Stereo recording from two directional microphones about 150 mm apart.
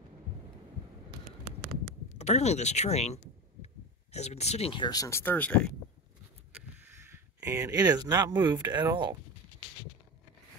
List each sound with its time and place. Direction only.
2.1 s speech: 45° left (ahead or behind); by 5.7 s 10° left (ahead or behind)
6.5 s speech: 15° right (ahead or behind); by 9.1 s 30° right (ahead or behind)